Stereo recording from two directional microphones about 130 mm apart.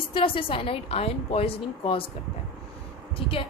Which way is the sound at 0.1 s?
40° left (ahead or behind).